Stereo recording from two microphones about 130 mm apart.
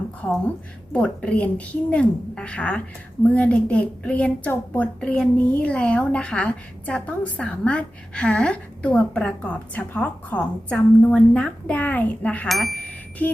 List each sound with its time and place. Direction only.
0.9 s a woman's voice: 10° left (ahead or behind)
12.5 s speech: centre (ahead or behind)
12.9 s bicycle bell: 10° left (ahead or behind)